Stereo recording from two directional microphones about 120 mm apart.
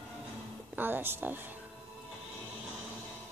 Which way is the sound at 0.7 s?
15° right (ahead or behind).